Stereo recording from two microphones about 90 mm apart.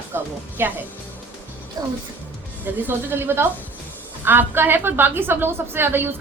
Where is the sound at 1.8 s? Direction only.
40° right (ahead or behind).